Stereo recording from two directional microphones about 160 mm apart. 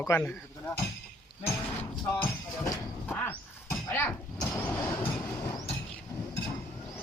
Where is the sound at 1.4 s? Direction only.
15° left (ahead or behind).